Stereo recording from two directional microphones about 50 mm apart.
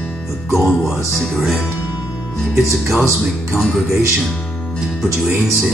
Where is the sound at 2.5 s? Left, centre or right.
Centre.